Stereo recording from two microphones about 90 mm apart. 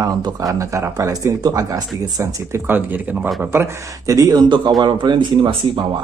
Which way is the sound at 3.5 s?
35° right (ahead or behind).